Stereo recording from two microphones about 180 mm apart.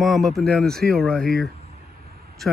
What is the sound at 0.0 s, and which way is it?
Speech, centre (ahead or behind).